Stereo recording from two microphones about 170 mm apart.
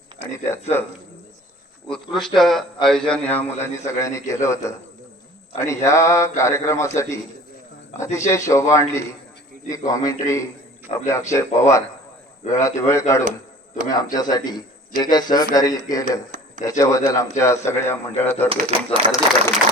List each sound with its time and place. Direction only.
1.9 s a man's voice: centre (ahead or behind)
18.4 s speech: 30° right (ahead or behind)